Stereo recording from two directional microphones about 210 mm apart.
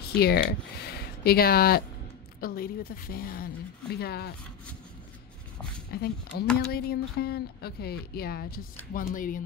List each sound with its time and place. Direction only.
0.1 s speech: 50° left (ahead or behind)
5.9 s speech: 50° left (ahead or behind)